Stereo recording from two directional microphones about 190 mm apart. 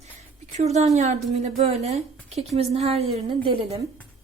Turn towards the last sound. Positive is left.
turn(degrees=-30)  # may be behind; listen again after turning